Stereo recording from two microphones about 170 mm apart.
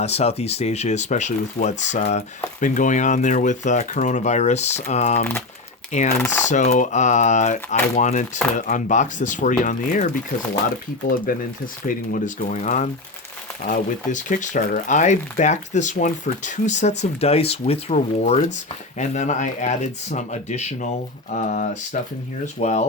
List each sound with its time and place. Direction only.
0.0 s speech: 40° left (ahead or behind)
6.1 s speech: 15° left (ahead or behind)
6.4 s speech: 45° left (ahead or behind)